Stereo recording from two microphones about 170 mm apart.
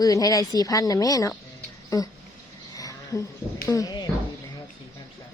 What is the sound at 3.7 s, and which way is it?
Speech, 20° left (ahead or behind).